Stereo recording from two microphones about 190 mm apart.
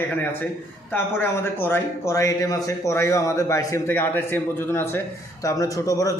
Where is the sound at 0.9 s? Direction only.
10° left (ahead or behind).